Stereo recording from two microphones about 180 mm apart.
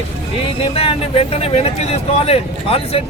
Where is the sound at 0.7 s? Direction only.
35° left (ahead or behind).